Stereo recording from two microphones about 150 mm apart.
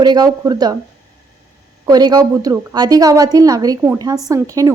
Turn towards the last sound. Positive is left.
turn(degrees=-20)  # may be behind; listen again after turning